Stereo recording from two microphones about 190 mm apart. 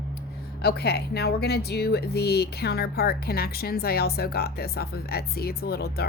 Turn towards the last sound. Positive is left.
turn(degrees=55)  # may be behind; listen again after turning